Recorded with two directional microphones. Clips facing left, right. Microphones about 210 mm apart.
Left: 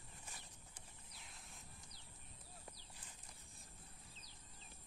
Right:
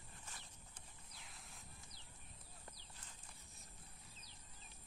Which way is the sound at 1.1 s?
Centre (ahead or behind).